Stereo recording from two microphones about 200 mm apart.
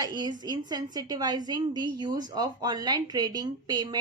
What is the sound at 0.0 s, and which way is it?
A woman's voice, 20° right (ahead or behind).